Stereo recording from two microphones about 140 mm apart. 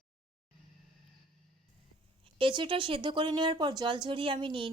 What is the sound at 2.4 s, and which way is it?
A woman's voice, 35° right (ahead or behind).